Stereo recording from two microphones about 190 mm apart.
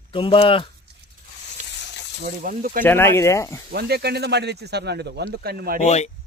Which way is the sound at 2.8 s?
10° left (ahead or behind).